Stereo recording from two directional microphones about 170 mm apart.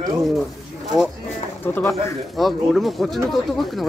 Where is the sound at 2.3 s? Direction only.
Centre (ahead or behind).